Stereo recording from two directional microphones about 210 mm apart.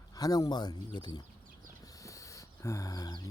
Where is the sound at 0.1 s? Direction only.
20° left (ahead or behind).